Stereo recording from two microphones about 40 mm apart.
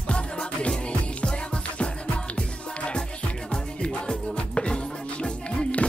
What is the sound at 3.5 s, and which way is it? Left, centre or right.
Music, centre.